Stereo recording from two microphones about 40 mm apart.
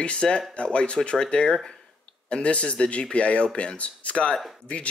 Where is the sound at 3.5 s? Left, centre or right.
Left.